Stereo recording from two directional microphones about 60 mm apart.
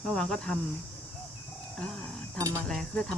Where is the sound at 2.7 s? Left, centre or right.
Centre.